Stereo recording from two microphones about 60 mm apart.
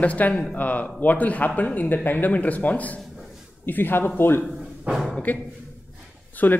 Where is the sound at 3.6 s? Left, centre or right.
Left.